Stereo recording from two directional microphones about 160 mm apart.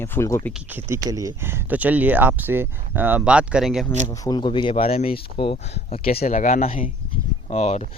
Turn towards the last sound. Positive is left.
turn(degrees=40)  # may be behind; listen again after turning